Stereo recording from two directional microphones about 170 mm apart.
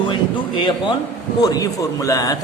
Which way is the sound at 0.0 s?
25° left (ahead or behind).